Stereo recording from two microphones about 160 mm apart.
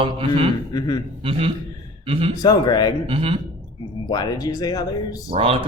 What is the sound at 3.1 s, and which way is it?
Speech, 35° right (ahead or behind).